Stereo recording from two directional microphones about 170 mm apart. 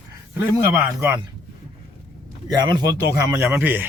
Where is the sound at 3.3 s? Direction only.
10° right (ahead or behind).